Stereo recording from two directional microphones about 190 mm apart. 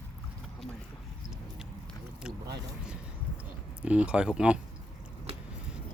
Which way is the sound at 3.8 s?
5° right (ahead or behind).